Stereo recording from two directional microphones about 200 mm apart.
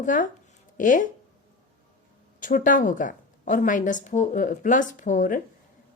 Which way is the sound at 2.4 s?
40° left (ahead or behind).